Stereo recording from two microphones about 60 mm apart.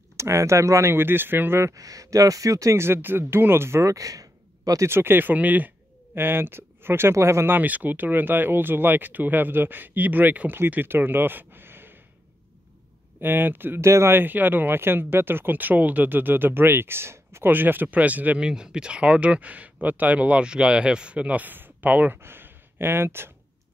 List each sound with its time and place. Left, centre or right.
0.2 s speech: right
0.9 s speech: right
1.6 s speech: right
2.8 s speech: right
3.8 s a sound: right
4.8 s speech: right
6.1 s speech: right
7.5 s speech: right
13.2 s speech: right
13.7 s speech: right
17.5 s speech: right
18.4 s speech: centre; by 23.3 s right